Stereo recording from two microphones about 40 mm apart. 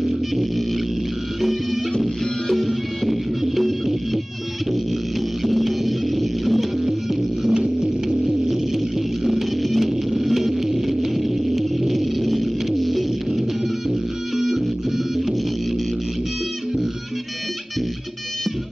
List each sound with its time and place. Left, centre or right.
0.0 s music: centre
5.4 s music: centre
7.5 s music: centre
8.5 s music: centre